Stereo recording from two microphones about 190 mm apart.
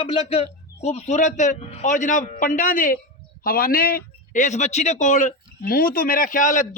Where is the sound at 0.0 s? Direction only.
30° left (ahead or behind).